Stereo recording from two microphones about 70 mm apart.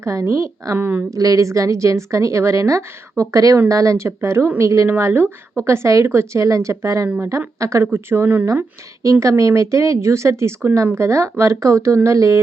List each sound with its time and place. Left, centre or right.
0.0 s a woman's voice: right
0.8 s speech: right
1.1 s a woman's voice: right
7.9 s speech: right
9.2 s a woman's voice: right